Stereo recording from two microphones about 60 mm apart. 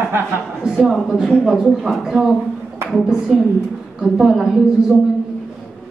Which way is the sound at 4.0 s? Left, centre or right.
Centre.